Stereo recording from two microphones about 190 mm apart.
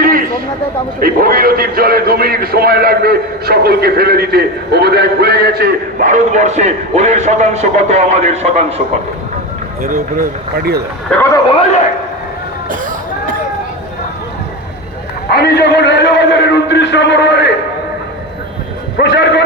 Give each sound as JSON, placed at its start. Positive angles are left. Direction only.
{"t": 0.0, "sound": "a sound", "side_deg": -50}
{"t": 0.9, "sound": "a man's voice", "side_deg": -50}
{"t": 9.8, "sound": "a man's voice", "side_deg": -50}
{"t": 11.2, "sound": "a man's voice", "side_deg": 20}
{"t": 15.3, "sound": "a man's voice", "side_deg": 55}
{"t": 19.0, "sound": "a man's voice", "side_deg": 65}